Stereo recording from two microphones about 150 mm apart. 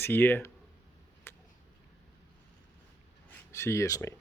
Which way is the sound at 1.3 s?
15° left (ahead or behind).